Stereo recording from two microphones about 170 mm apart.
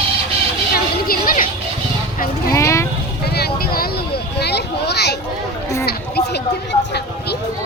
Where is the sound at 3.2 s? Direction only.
70° left (ahead or behind).